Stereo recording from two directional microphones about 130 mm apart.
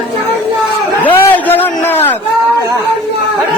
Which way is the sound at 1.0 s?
15° left (ahead or behind).